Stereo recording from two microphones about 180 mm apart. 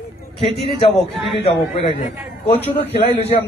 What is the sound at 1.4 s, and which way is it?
Speech, 30° left (ahead or behind).